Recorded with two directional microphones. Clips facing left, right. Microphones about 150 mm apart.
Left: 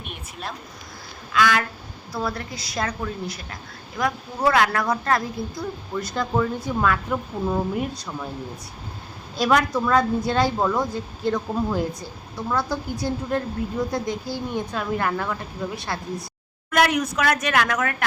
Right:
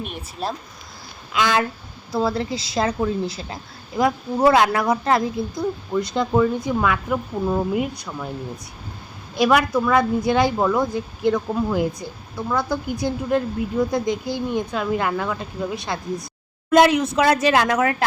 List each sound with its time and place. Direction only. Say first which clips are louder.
0.0 s a woman's voice: right 7 dB; 35° right (ahead or behind)
1.3 s speech: right 1 dB; 20° right (ahead or behind)
6.8 s speech: right 1 dB; 5° right (ahead or behind)
7.7 s a woman's voice: right 3 dB; 15° right (ahead or behind)
9.3 s a woman's voice: right 3 dB; 10° right (ahead or behind); by 17.9 s 25° right (ahead or behind)